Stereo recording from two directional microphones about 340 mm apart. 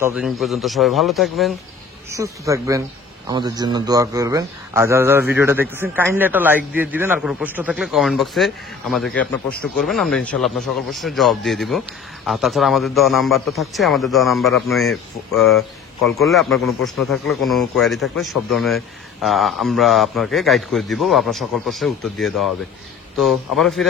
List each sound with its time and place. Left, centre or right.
0.0 s a man's voice: centre